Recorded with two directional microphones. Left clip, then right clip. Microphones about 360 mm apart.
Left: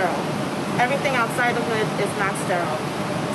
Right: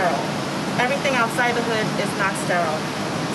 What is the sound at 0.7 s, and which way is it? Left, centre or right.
Speech, centre.